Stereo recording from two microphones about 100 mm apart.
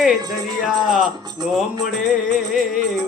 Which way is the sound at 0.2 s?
40° right (ahead or behind).